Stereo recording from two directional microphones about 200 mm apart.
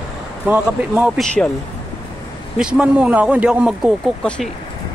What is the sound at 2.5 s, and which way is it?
Speech, 5° right (ahead or behind).